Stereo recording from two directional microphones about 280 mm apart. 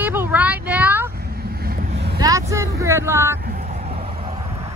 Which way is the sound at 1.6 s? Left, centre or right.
Right.